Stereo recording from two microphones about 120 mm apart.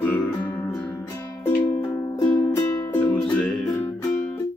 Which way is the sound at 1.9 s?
25° left (ahead or behind).